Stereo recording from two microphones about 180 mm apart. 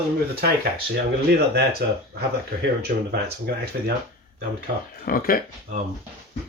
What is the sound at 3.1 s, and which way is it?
Speech, 65° right (ahead or behind).